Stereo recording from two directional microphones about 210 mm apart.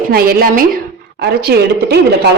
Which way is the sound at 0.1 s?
45° right (ahead or behind).